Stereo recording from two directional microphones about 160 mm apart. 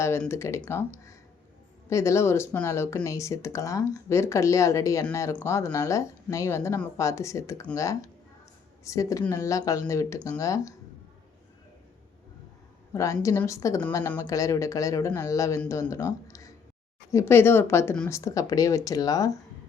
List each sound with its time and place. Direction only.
0.3 s speech: 15° left (ahead or behind)
12.9 s a woman's voice: 20° left (ahead or behind)